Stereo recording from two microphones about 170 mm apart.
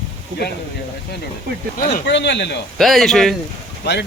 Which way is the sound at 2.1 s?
90° left.